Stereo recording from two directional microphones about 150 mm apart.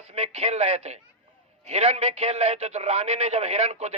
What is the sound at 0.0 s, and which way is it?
A man's voice, 45° right (ahead or behind).